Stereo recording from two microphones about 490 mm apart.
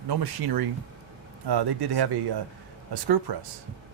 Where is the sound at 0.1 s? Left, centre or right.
Right.